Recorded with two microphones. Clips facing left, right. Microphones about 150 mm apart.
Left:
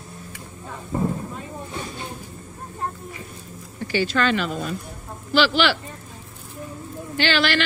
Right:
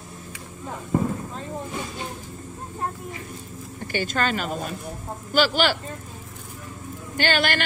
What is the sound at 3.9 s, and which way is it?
Speech, 50° right (ahead or behind).